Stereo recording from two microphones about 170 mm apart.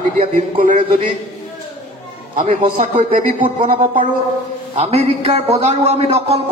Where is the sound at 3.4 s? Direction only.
30° right (ahead or behind).